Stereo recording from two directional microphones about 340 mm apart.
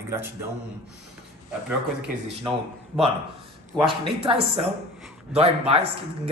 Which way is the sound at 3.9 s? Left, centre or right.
Centre.